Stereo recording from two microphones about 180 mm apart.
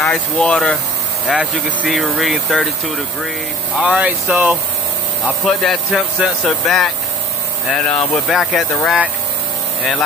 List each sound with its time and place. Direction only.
0.0 s speech: 5° left (ahead or behind)
3.7 s speech: 5° right (ahead or behind)
7.9 s speech: centre (ahead or behind)